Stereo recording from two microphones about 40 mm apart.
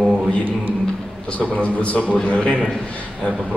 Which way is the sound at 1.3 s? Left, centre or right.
Left.